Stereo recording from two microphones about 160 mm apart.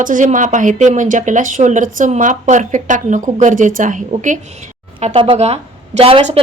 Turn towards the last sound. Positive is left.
turn(degrees=-35)  # may be behind; listen again after turning